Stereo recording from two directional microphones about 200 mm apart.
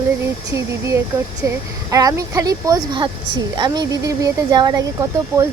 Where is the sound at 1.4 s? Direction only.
15° right (ahead or behind).